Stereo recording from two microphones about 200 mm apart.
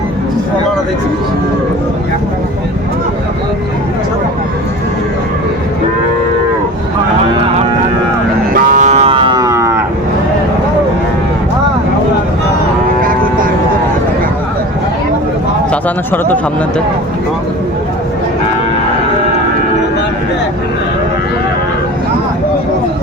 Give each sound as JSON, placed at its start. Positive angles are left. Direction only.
{"t": 8.5, "sound": "cattle", "side_deg": -40}
{"t": 13.0, "sound": "vehicle", "side_deg": -45}
{"t": 15.7, "sound": "speech", "side_deg": 10}